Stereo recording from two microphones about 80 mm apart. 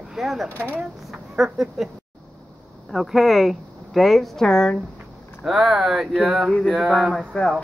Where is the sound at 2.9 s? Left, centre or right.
Centre.